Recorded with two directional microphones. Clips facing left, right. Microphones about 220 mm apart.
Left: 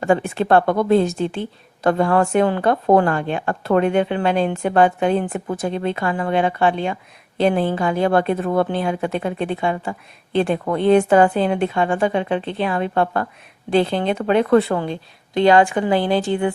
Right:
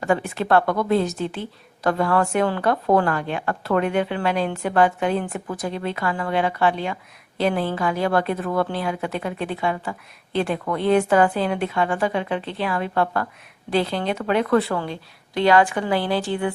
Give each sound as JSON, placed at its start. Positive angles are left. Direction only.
{"t": 0.0, "sound": "a woman's voice", "side_deg": 25}